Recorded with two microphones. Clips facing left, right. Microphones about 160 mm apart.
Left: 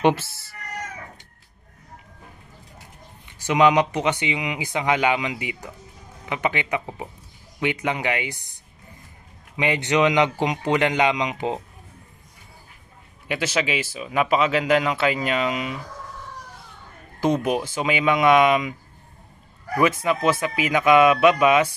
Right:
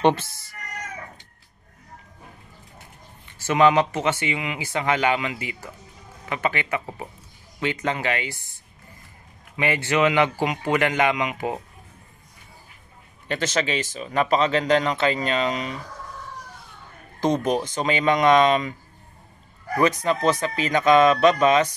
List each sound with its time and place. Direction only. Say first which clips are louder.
0.0 s speech: even; 10° left (ahead or behind)
3.3 s speech: even; 15° left (ahead or behind)
9.6 s speech: left 1 dB; 20° left (ahead or behind)
13.3 s speech: even; 10° left (ahead or behind)
17.2 s speech: even; 5° left (ahead or behind)
20.0 s speech: even; 10° left (ahead or behind)